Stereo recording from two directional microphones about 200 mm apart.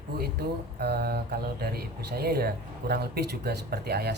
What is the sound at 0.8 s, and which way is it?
Speech, 50° right (ahead or behind).